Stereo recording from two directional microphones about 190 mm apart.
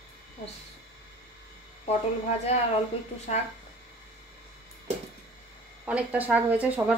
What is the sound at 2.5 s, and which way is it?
Speech, 35° left (ahead or behind).